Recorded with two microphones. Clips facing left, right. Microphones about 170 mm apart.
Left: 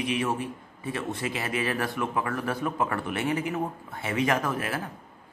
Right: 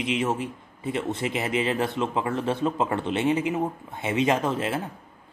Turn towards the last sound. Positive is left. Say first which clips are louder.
# right 3 dB
turn(degrees=-25)  # may be behind; listen again after turning